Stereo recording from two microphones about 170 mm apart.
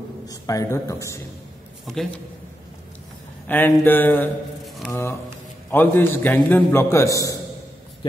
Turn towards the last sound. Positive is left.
turn(degrees=15)  # may be behind; listen again after turning